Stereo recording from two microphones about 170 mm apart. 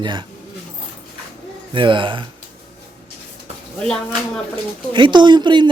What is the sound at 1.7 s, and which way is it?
Speech, 30° right (ahead or behind).